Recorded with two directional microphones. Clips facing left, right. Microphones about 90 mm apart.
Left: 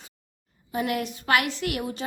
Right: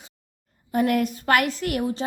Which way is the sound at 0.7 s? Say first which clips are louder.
Right 6 dB; 45° right (ahead or behind).